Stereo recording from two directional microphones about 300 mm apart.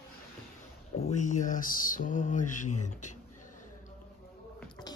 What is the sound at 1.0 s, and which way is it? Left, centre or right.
Speech, left.